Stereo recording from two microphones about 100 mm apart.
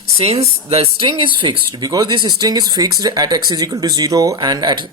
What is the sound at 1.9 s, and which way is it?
Speech, 40° right (ahead or behind).